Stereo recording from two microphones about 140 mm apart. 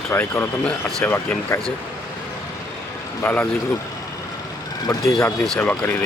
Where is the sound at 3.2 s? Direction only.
15° left (ahead or behind).